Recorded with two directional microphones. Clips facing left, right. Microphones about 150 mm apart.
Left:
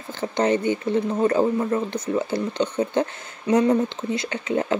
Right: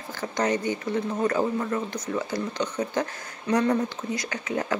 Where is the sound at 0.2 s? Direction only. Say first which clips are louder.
Left 5 dB; 25° left (ahead or behind).